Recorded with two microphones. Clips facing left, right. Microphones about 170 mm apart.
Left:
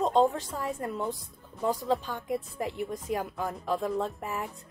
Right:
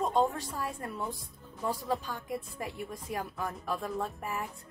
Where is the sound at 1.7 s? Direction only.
20° left (ahead or behind).